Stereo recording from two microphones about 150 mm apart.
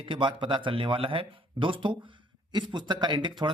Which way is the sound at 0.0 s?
35° right (ahead or behind).